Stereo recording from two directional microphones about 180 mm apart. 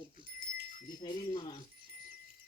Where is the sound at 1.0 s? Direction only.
25° left (ahead or behind).